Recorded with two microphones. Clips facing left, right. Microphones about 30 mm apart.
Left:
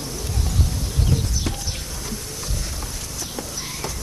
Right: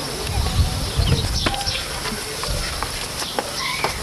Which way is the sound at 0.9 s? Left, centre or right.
Right.